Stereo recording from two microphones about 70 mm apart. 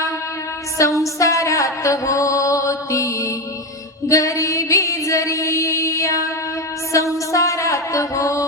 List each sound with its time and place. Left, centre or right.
0.8 s music: left